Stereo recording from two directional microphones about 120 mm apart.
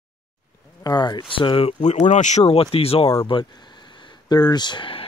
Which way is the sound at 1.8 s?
80° left.